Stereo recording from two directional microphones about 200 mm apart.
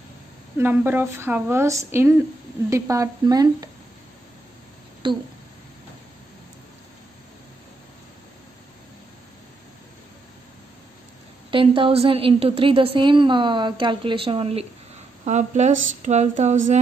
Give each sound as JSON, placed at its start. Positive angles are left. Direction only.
{"t": 0.6, "sound": "speech", "side_deg": -10}
{"t": 5.0, "sound": "a woman's voice", "side_deg": -25}
{"t": 11.5, "sound": "a woman's voice", "side_deg": -25}
{"t": 15.2, "sound": "a sound", "side_deg": -35}